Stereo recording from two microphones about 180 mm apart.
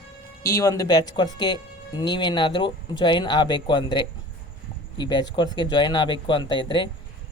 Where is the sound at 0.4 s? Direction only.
20° left (ahead or behind).